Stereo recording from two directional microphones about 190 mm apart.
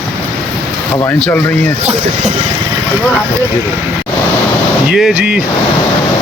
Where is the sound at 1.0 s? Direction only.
10° left (ahead or behind).